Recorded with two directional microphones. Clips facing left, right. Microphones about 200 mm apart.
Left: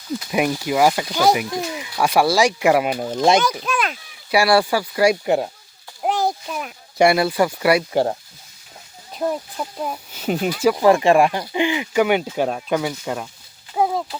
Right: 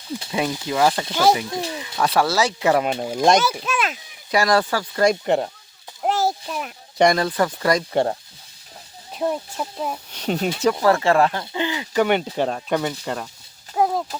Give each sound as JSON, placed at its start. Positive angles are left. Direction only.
{"t": 0.3, "sound": "speech", "side_deg": 15}
{"t": 4.3, "sound": "a child's voice", "side_deg": 10}
{"t": 9.1, "sound": "speech", "side_deg": 0}
{"t": 13.7, "sound": "a sound", "side_deg": 0}